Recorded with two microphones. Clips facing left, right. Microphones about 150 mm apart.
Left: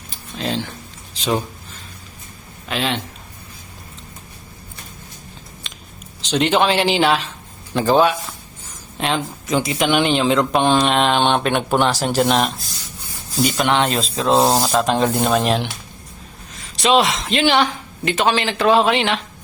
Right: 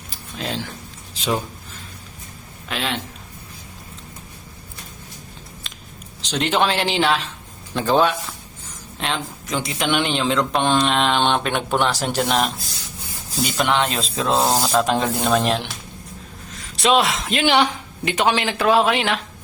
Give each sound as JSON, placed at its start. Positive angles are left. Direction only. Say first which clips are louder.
{"t": 0.3, "sound": "speech", "louder": "left 4 dB", "side_deg": -5}
{"t": 2.6, "sound": "speech", "louder": "left 3 dB", "side_deg": 0}
{"t": 5.7, "sound": "a sound", "louder": "left 1 dB", "side_deg": 0}
{"t": 6.2, "sound": "speech", "louder": "left 3 dB", "side_deg": 0}
{"t": 14.4, "sound": "speech", "louder": "left 3 dB", "side_deg": 15}
{"t": 14.7, "sound": "speech", "louder": "left 2 dB", "side_deg": 0}
{"t": 16.7, "sound": "speech", "louder": "left 2 dB", "side_deg": 0}
{"t": 17.4, "sound": "speech", "louder": "even", "side_deg": -15}